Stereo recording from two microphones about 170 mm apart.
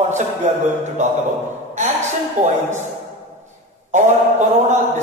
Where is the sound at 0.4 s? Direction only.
45° right (ahead or behind).